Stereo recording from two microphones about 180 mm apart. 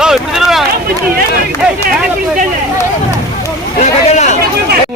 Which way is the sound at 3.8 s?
40° left (ahead or behind).